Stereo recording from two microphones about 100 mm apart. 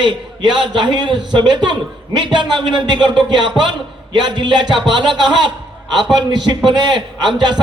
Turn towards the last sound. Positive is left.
turn(degrees=-45)  # may be behind; listen again after turning